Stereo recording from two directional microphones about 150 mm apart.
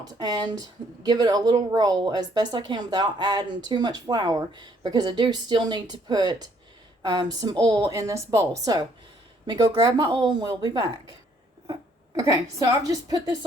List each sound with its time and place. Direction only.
0.0 s a woman's voice: 25° right (ahead or behind)